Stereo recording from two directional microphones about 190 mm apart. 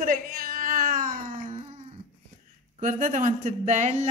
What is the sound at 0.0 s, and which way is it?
Cat, 50° right (ahead or behind).